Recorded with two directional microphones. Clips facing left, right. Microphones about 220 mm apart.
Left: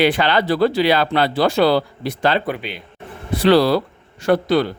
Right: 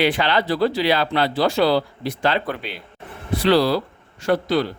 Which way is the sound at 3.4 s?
60° left (ahead or behind).